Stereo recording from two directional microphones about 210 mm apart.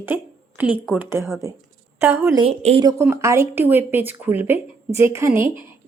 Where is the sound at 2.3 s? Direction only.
30° right (ahead or behind).